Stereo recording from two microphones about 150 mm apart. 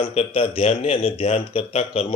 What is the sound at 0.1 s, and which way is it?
A man's voice, 40° left (ahead or behind).